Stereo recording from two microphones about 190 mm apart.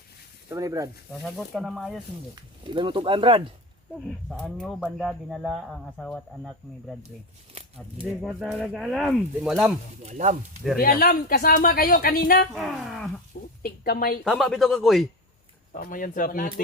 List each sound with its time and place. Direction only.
0.5 s speech: 15° right (ahead or behind)
1.2 s speech: centre (ahead or behind)
2.3 s speech: 25° right (ahead or behind)
4.3 s speech: centre (ahead or behind)
8.2 s speech: centre (ahead or behind)
10.0 s speech: 35° right (ahead or behind)
10.8 s speech: 50° left (ahead or behind)
12.5 s speech: centre (ahead or behind)
13.6 s speech: 50° left (ahead or behind)
14.3 s speech: centre (ahead or behind)
15.7 s speech: 45° left (ahead or behind)